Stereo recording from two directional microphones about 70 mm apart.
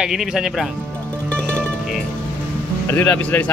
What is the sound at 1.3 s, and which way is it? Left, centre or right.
Music, centre.